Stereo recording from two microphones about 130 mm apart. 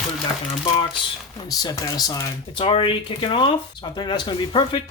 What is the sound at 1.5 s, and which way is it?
Speech, 25° left (ahead or behind).